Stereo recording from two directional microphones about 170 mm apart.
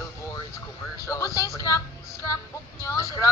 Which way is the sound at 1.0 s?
20° left (ahead or behind).